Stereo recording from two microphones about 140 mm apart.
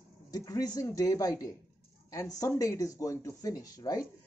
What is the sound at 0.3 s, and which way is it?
Speech, 25° left (ahead or behind).